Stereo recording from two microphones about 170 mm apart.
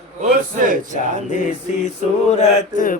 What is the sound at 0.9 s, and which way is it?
Mantra, 50° left (ahead or behind).